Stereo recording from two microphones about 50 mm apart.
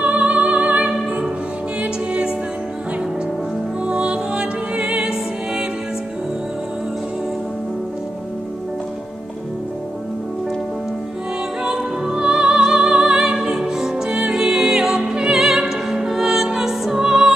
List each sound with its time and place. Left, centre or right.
0.0 s music: right
3.8 s music: right
11.6 s music: centre